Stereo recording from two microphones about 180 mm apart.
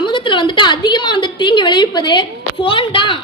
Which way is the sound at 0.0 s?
25° left (ahead or behind).